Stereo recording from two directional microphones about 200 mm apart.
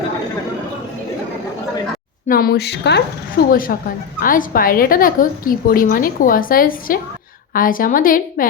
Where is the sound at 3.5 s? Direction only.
45° left (ahead or behind).